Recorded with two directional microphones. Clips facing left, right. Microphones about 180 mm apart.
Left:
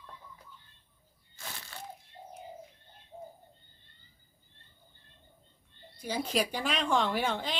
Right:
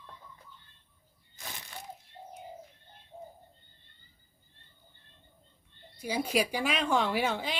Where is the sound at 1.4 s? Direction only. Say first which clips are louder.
Even; 20° right (ahead or behind).